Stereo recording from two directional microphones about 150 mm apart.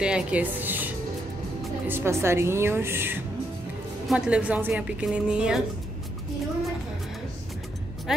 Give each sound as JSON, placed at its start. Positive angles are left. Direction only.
{"t": 0.0, "sound": "a woman's voice", "side_deg": -5}
{"t": 1.9, "sound": "a woman's voice", "side_deg": -15}